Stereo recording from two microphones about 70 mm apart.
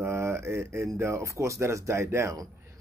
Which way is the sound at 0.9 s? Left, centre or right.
Right.